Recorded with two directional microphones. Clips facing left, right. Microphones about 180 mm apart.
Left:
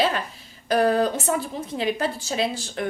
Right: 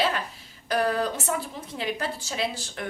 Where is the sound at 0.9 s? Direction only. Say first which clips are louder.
Left 5 dB; 30° left (ahead or behind).